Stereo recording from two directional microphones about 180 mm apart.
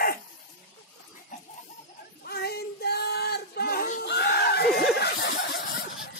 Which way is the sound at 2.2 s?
60° left (ahead or behind).